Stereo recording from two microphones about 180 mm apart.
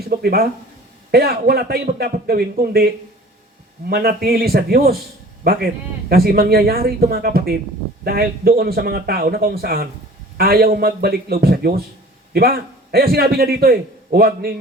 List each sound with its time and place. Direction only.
0.1 s speech: 60° right (ahead or behind)